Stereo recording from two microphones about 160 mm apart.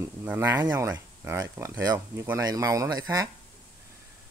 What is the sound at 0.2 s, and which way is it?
Speech, 10° right (ahead or behind).